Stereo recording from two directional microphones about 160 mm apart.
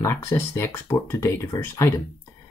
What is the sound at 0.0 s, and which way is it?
Speech, 15° left (ahead or behind).